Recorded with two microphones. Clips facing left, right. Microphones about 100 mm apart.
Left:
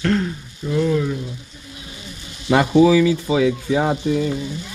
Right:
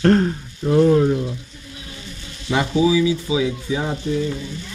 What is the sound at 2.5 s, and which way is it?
A man's voice, 60° left (ahead or behind).